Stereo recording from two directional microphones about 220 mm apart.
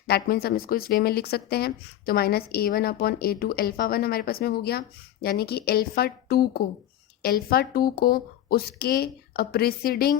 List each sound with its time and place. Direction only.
0.1 s speech: 45° left (ahead or behind)